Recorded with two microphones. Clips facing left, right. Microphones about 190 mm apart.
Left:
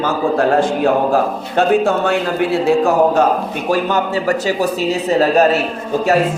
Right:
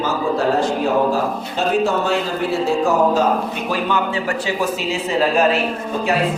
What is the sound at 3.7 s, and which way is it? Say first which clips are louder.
A man's voice: left 5 dB; 40° left (ahead or behind).